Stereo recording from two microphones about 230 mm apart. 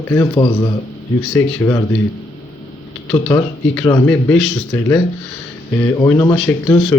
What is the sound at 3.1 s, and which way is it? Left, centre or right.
Speech, centre.